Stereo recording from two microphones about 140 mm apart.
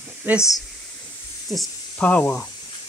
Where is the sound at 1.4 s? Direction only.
5° left (ahead or behind).